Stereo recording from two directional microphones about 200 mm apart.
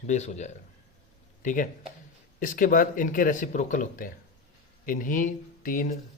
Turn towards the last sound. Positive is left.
turn(degrees=40)  # may be behind; listen again after turning